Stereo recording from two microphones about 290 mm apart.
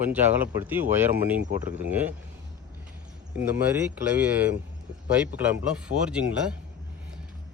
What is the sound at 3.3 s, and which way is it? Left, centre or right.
Speech, centre.